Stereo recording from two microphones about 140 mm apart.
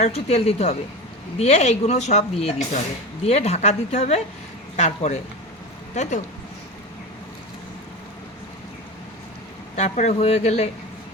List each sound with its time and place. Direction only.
0.0 s a woman's voice: 50° left (ahead or behind)
9.7 s a woman's voice: 55° left (ahead or behind)